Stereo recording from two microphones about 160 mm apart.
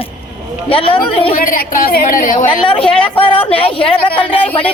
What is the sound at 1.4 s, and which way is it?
A woman's voice, 60° left (ahead or behind).